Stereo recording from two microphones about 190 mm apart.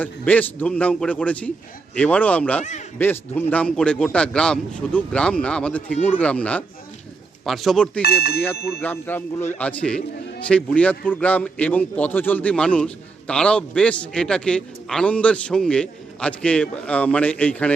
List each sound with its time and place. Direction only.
0.0 s a man's voice: 10° left (ahead or behind)
8.0 s speech: 55° left (ahead or behind)
8.8 s a man's voice: 10° left (ahead or behind)